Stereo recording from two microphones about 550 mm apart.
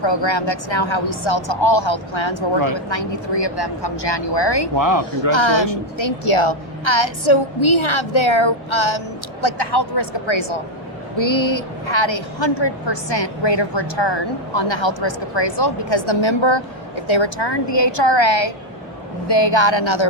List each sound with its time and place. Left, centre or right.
0.0 s a woman's voice: left
4.8 s speech: right
5.3 s a woman's voice: left
10.2 s a woman's voice: left